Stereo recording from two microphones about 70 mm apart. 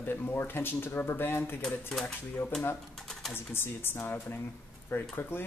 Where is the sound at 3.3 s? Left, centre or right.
Left.